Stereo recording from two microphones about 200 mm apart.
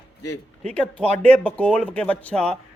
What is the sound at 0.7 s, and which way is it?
Speech, 5° left (ahead or behind).